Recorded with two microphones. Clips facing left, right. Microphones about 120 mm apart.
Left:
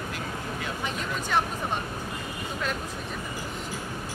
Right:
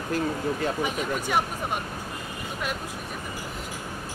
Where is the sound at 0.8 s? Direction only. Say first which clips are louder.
Right 4 dB; 10° right (ahead or behind).